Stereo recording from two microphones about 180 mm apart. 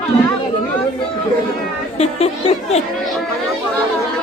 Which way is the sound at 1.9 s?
35° left (ahead or behind).